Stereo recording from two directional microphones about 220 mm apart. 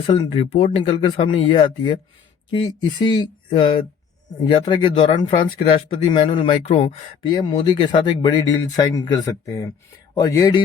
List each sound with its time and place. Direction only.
0.1 s speech: 30° left (ahead or behind)